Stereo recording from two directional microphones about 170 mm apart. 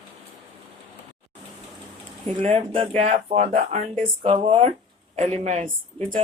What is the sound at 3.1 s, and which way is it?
Speech, 45° right (ahead or behind).